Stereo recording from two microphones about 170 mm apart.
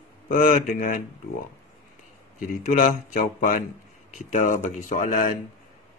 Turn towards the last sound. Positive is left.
turn(degrees=50)  # may be behind; listen again after turning